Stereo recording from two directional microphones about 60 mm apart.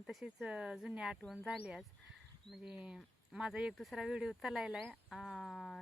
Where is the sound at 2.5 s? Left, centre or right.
Centre.